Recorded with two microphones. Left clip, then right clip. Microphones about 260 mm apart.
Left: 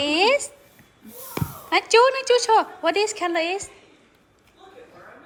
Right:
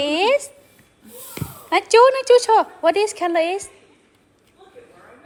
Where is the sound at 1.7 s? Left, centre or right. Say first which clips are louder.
Right 4 dB; centre.